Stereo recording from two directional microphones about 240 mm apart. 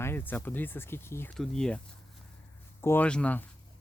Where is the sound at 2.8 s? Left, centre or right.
Centre.